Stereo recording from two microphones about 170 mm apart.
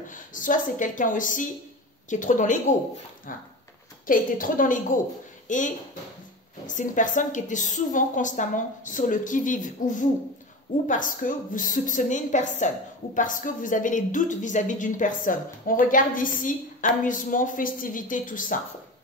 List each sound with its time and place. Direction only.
0.1 s a woman's voice: 50° left (ahead or behind)